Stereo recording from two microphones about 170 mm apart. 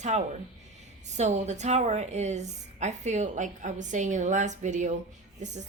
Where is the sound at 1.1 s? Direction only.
40° right (ahead or behind).